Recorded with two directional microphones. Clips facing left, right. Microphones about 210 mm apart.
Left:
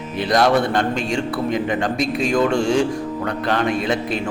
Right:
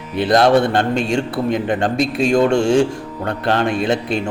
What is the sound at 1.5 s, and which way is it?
Speech, 55° right (ahead or behind).